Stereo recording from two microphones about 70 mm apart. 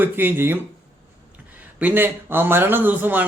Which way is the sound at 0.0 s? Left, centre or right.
Right.